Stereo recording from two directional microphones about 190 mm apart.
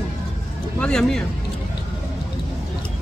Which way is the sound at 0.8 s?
5° left (ahead or behind).